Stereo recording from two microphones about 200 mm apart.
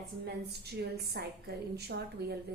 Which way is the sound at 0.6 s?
55° right (ahead or behind).